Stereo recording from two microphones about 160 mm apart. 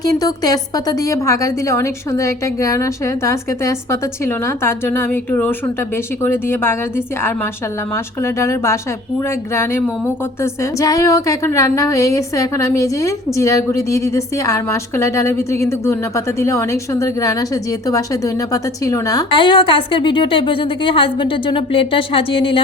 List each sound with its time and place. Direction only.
0.0 s a woman's voice: 25° left (ahead or behind)
10.4 s speech: 20° left (ahead or behind)